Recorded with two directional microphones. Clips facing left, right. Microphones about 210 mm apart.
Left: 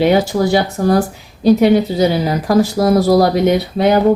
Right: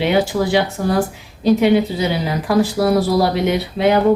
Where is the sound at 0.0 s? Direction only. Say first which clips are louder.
Left 4 dB; 40° left (ahead or behind).